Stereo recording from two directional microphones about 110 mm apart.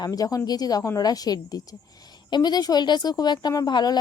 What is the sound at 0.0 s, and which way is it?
Speech, 35° left (ahead or behind).